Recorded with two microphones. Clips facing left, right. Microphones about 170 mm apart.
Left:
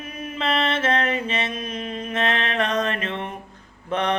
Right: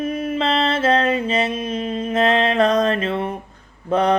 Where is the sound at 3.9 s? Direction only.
35° right (ahead or behind).